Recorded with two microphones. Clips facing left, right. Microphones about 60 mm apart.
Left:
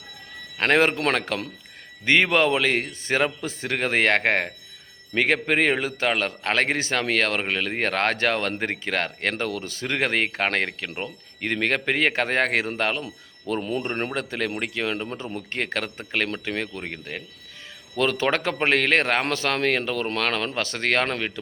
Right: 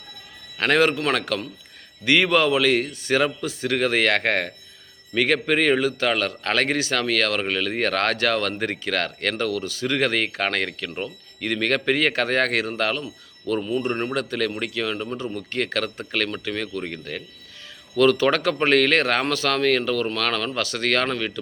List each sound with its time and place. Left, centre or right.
0.5 s speech: left